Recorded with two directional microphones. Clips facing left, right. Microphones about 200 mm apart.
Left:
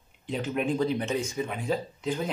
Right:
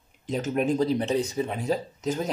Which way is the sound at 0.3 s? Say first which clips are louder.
Right 3 dB; 40° right (ahead or behind).